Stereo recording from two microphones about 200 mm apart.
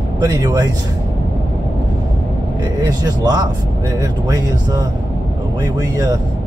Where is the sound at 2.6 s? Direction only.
20° right (ahead or behind).